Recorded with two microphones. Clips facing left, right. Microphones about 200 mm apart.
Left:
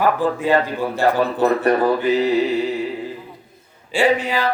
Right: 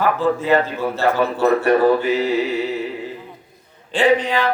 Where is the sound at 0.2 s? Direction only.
15° left (ahead or behind).